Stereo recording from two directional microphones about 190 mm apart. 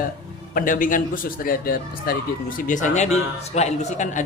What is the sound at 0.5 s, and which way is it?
Speech, 45° left (ahead or behind).